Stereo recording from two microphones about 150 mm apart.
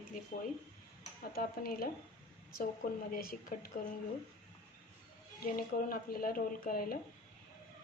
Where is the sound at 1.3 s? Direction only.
80° left.